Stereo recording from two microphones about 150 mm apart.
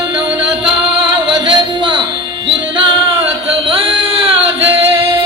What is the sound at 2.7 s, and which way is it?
Music, 35° right (ahead or behind).